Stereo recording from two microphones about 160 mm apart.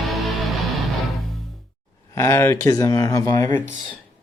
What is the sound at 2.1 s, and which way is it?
Speech, 15° left (ahead or behind).